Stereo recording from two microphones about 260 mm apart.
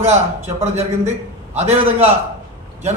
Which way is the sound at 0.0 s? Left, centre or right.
Right.